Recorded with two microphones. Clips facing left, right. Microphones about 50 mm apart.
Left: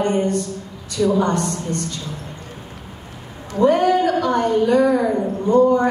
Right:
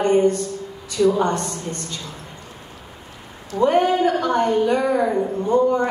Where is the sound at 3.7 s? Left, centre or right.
Right.